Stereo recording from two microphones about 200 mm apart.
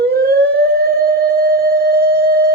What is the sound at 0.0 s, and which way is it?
Siren, 50° right (ahead or behind).